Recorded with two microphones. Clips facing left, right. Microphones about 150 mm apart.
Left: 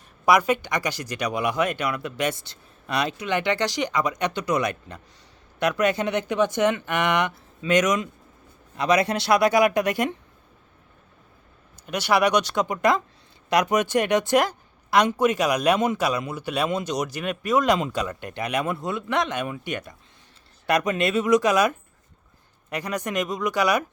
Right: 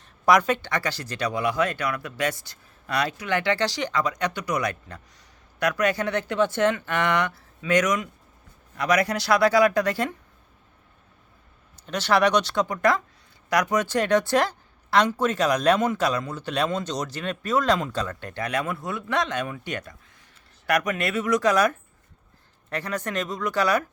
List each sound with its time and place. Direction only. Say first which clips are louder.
0.3 s speech: even; 10° left (ahead or behind)
11.9 s a woman's voice: even; 10° left (ahead or behind)